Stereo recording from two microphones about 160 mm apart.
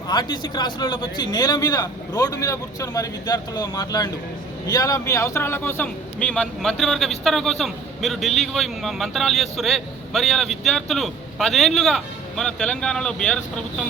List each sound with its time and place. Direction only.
0.1 s a man's voice: 30° left (ahead or behind); by 13.8 s 5° left (ahead or behind)